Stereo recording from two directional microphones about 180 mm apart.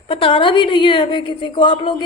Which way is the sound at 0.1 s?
30° left (ahead or behind).